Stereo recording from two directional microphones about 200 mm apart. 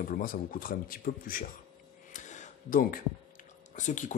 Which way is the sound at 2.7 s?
45° left (ahead or behind).